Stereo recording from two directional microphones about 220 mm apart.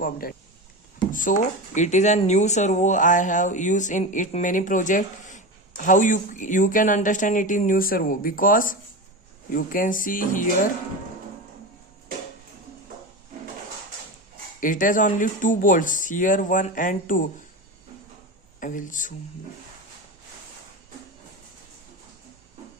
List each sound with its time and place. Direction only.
0.0 s speech: 40° left (ahead or behind)
14.6 s speech: 35° left (ahead or behind)
18.6 s speech: 35° left (ahead or behind)